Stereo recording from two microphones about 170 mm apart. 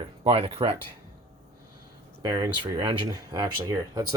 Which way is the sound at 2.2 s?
25° right (ahead or behind).